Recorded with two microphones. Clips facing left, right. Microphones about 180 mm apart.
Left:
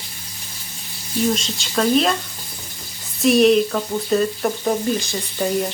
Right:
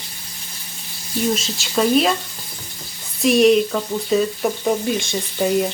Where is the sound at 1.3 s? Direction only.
5° right (ahead or behind).